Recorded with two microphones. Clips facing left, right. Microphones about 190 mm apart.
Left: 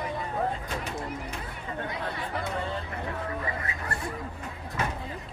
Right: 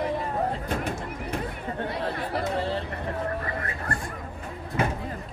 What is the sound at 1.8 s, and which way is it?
Chatter, 30° right (ahead or behind).